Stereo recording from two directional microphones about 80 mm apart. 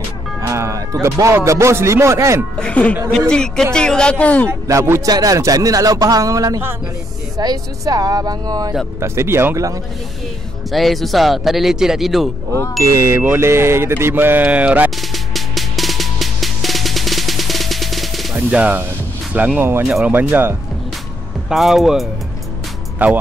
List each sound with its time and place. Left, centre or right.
0.4 s music: right
1.3 s speech: right
2.6 s speech: centre
4.5 s speech: right
5.0 s speech: right
9.0 s speech: right
10.7 s speech: centre
12.8 s speech: right
13.2 s speech: right
15.0 s music: centre
18.5 s speech: centre
19.6 s speech: right
21.5 s speech: centre
23.0 s speech: right